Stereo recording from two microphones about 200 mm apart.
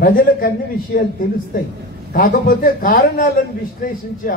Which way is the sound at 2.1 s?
45° left (ahead or behind).